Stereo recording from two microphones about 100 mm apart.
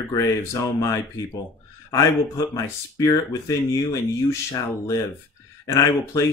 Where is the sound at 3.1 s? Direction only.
40° left (ahead or behind).